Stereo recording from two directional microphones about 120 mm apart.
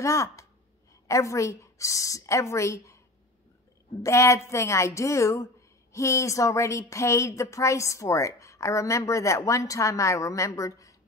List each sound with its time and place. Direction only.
0.0 s a woman's voice: 25° left (ahead or behind)
4.0 s a woman's voice: 25° left (ahead or behind)